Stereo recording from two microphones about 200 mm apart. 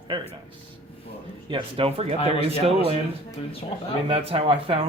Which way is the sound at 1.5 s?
25° right (ahead or behind).